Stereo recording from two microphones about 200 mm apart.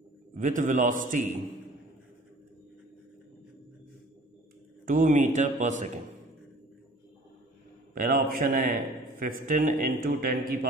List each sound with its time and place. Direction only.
0.3 s a man's voice: 40° right (ahead or behind)
4.8 s a man's voice: 40° right (ahead or behind)
7.9 s a man's voice: 45° right (ahead or behind)